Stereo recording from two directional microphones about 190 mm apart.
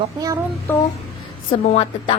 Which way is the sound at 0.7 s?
10° left (ahead or behind).